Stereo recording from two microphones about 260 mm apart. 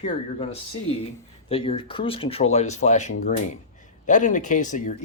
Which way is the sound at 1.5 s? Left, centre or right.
Left.